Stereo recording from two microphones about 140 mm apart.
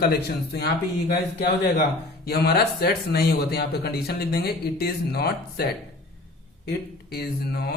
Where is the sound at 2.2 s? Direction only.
90° left.